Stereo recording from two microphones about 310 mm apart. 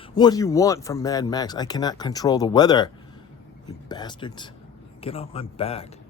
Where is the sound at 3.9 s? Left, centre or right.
Centre.